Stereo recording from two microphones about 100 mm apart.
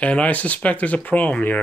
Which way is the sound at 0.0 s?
15° left (ahead or behind).